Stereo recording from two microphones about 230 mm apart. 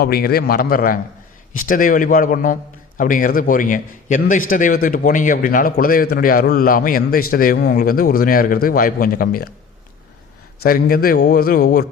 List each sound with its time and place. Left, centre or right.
0.0 s a man's voice: left
10.6 s a man's voice: left